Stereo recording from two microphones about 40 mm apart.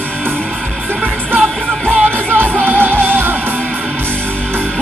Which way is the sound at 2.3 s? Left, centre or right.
Right.